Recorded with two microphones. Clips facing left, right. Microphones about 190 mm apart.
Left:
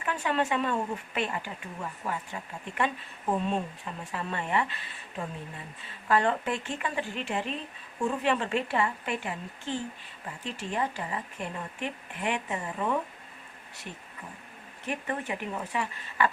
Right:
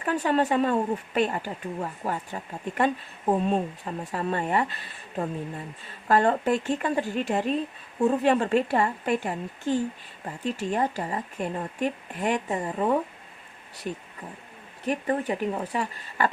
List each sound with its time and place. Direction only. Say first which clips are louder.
0.0 s speech: right 5 dB; 40° right (ahead or behind)
14.8 s speech: right 7 dB; 35° right (ahead or behind)